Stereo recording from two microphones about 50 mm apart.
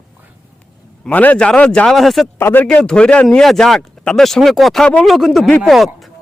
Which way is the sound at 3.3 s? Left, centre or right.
Centre.